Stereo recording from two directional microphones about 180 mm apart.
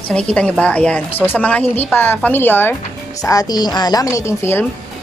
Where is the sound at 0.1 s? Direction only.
5° left (ahead or behind).